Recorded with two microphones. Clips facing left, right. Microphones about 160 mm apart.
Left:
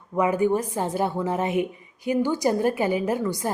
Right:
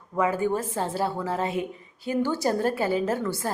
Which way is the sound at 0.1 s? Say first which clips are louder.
Left 3 dB; 15° left (ahead or behind).